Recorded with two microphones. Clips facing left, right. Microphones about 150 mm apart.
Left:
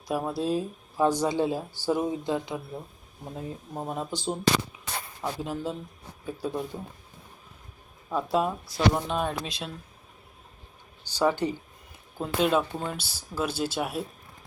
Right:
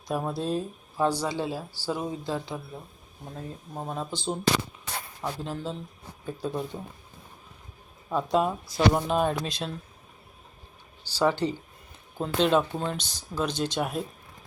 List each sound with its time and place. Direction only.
0.1 s speech: 5° left (ahead or behind)
8.1 s speech: centre (ahead or behind)
11.0 s speech: 15° left (ahead or behind)